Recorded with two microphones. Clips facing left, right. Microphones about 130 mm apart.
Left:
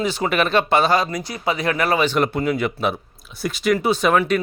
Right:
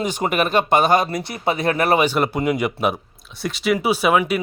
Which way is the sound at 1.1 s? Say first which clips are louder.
Right 1 dB; 25° right (ahead or behind).